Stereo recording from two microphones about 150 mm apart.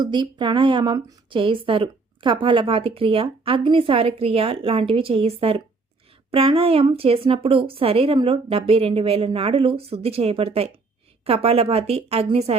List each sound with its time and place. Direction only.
0.0 s a woman's voice: 30° right (ahead or behind)